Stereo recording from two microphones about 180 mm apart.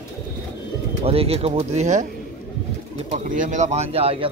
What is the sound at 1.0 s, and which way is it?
Speech, 35° right (ahead or behind).